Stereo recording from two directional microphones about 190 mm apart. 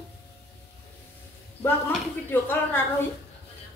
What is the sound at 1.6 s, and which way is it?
Speech, 10° left (ahead or behind).